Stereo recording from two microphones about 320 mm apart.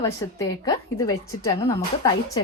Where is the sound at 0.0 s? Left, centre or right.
Centre.